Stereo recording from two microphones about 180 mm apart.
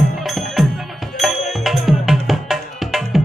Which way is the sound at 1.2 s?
Centre (ahead or behind).